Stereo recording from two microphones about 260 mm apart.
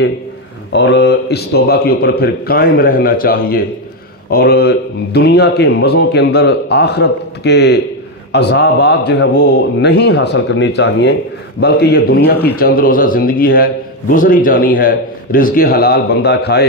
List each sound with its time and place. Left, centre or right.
0.7 s speech: left